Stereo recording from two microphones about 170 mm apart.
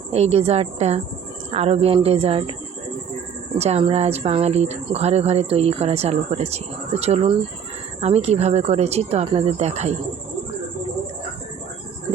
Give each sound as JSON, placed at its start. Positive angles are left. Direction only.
{"t": 0.1, "sound": "speech", "side_deg": -40}
{"t": 3.6, "sound": "speech", "side_deg": -35}